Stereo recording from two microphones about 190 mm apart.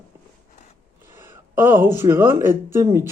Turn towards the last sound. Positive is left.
turn(degrees=-15)  # may be behind; listen again after turning